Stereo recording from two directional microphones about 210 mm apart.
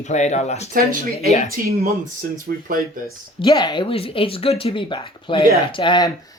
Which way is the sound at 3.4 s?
20° left (ahead or behind).